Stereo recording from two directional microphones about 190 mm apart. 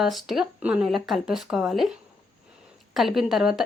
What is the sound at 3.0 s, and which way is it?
Speech, centre (ahead or behind).